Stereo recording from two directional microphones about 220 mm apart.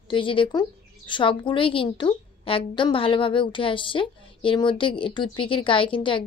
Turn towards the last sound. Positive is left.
turn(degrees=25)  # may be behind; listen again after turning